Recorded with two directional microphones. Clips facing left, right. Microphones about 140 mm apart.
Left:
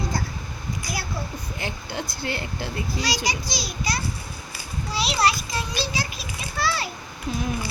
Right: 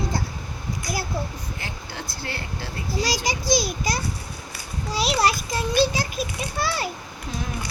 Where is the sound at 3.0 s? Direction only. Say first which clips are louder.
Right 4 dB; 45° right (ahead or behind).